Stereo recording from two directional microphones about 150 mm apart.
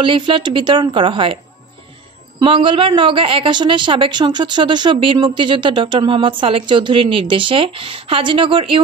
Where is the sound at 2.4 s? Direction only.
35° right (ahead or behind).